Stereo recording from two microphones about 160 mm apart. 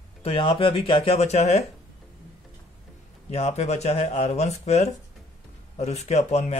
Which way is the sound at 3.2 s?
40° left (ahead or behind).